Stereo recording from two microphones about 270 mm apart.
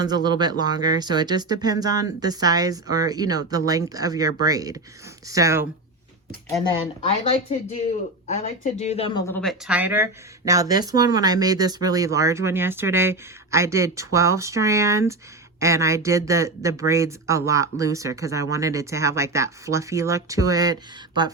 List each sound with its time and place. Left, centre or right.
0.0 s speech: centre
7.1 s speech: left; by 20.7 s centre